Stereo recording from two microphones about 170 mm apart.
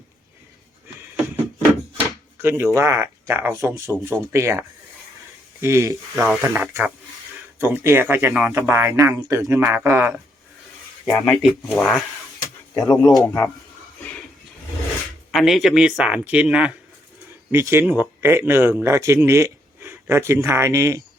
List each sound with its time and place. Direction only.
2.4 s speech: 15° right (ahead or behind)
6.2 s speech: 5° right (ahead or behind)
6.5 s speech: 15° right (ahead or behind)
11.0 s speech: centre (ahead or behind)
12.7 s speech: 20° left (ahead or behind)
14.0 s music: 5° left (ahead or behind)
15.3 s speech: centre (ahead or behind); by 21.0 s 15° right (ahead or behind)